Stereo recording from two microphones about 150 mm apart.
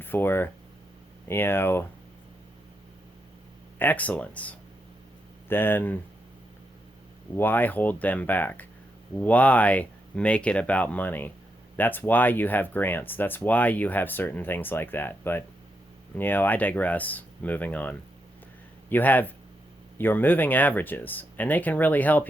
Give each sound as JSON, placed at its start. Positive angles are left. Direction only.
{"t": 0.0, "sound": "speech", "side_deg": 15}
{"t": 3.8, "sound": "speech", "side_deg": 10}
{"t": 7.3, "sound": "speech", "side_deg": 15}